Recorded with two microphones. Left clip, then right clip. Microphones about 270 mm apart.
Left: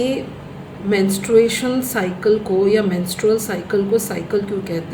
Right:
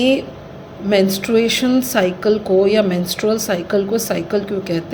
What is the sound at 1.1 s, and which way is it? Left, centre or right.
A woman's voice, right.